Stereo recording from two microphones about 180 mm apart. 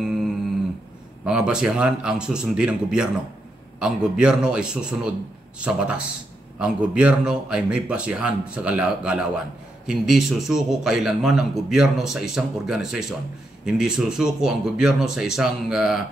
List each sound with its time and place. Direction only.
0.0 s humming: 5° right (ahead or behind)
1.2 s a man's voice: 5° right (ahead or behind)